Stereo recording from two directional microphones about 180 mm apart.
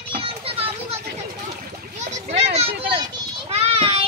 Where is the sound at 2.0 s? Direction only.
40° right (ahead or behind).